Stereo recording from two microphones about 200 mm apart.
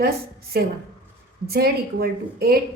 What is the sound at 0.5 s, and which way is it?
A woman's voice, 50° right (ahead or behind).